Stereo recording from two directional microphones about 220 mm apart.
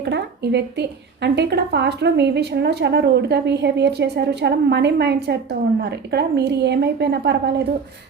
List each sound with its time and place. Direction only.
0.0 s a woman's voice: 50° right (ahead or behind)